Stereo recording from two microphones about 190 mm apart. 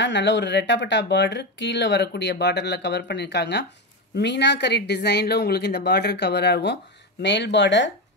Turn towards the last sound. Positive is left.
turn(degrees=70)  # may be behind; listen again after turning